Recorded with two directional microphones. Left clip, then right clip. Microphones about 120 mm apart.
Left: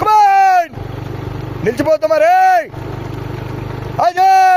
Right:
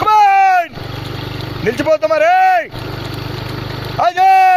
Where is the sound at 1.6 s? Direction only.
40° left (ahead or behind).